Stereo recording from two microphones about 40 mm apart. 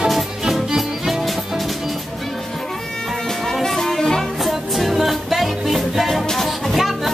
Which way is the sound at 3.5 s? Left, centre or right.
Centre.